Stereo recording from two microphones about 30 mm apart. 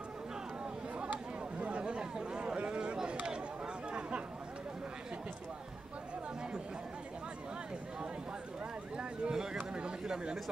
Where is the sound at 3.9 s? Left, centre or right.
Right.